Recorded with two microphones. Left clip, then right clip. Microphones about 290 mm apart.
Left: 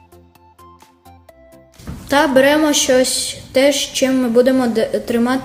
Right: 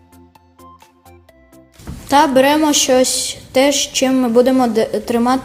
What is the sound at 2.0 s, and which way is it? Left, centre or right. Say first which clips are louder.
A woman's voice: right 1 dB; centre.